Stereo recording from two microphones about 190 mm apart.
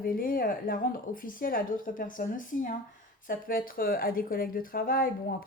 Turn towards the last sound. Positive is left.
turn(degrees=50)  # may be behind; listen again after turning